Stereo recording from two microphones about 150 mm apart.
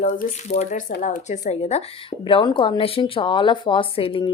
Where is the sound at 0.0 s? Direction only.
60° left (ahead or behind).